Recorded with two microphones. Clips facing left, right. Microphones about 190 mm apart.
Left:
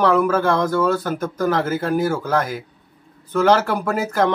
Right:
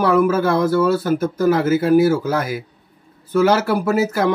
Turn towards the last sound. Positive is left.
turn(degrees=-10)  # may be behind; listen again after turning